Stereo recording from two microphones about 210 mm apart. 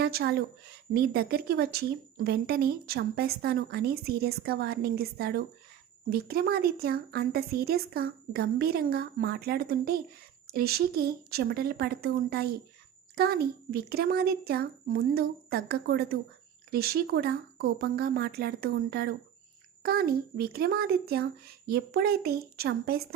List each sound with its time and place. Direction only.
0.0 s a woman's voice: 50° right (ahead or behind)